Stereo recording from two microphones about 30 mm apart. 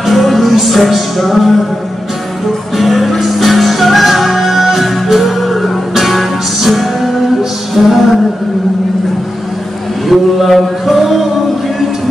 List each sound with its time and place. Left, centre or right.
0.0 s music: centre
2.8 s music: centre
10.0 s mantra: centre